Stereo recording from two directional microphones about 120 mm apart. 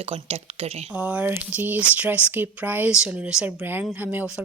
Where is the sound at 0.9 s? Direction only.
10° right (ahead or behind).